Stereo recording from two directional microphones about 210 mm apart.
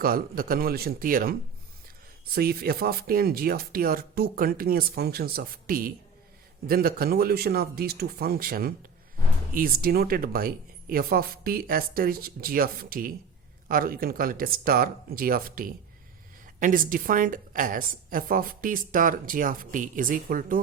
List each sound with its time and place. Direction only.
0.0 s a woman's voice: 45° right (ahead or behind)